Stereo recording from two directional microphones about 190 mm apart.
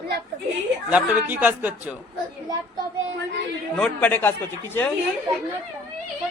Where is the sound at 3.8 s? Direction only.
5° left (ahead or behind).